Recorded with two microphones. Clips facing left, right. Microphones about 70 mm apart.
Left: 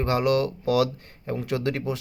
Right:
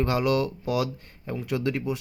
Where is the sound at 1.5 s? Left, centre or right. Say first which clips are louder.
Even; left.